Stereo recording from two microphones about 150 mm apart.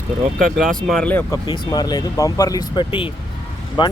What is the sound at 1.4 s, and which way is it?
Speech, 30° left (ahead or behind).